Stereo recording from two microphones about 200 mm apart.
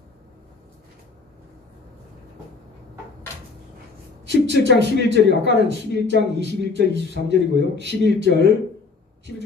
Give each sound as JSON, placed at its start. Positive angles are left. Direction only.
{"t": 4.3, "sound": "a man's voice", "side_deg": -60}